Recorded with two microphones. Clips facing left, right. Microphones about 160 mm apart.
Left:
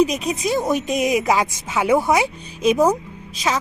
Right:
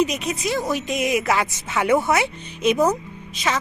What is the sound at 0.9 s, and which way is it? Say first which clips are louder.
Speech: left 3 dB; 40° left (ahead or behind).